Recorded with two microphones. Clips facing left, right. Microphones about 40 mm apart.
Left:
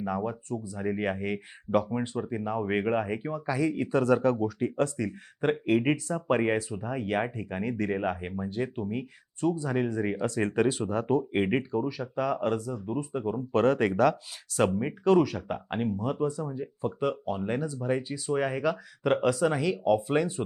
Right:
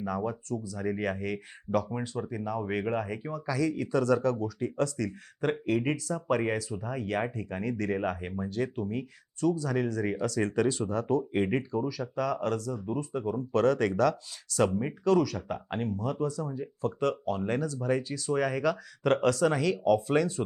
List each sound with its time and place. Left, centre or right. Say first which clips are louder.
0.0 s speech: left 1 dB; centre
1.9 s speech: left 3 dB; centre